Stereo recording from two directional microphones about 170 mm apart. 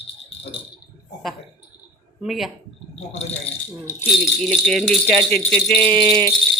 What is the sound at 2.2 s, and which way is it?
Speech, centre (ahead or behind).